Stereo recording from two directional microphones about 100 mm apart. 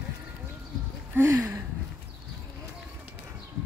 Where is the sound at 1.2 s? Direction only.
25° right (ahead or behind).